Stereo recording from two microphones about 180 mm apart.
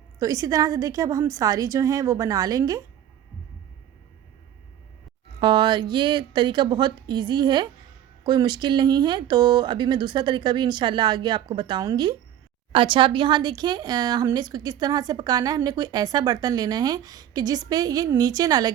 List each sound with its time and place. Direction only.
0.2 s a woman's voice: 20° right (ahead or behind)
5.4 s a woman's voice: 25° right (ahead or behind)